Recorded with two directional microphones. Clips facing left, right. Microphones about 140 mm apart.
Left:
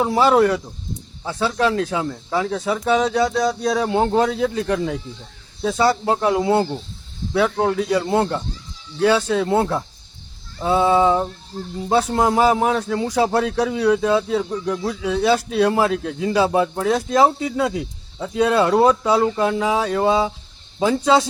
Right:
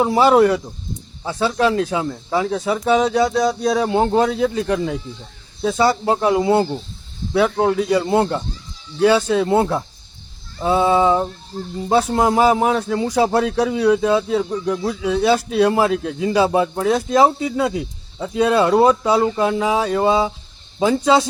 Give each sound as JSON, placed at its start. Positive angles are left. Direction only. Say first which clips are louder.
{"t": 0.0, "sound": "speech", "louder": "right 2 dB", "side_deg": -10}